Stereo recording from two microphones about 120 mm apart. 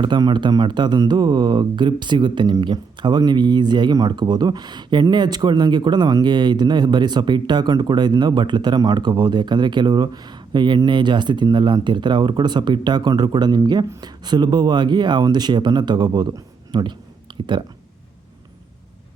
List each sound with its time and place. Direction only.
0.0 s speech: 40° right (ahead or behind)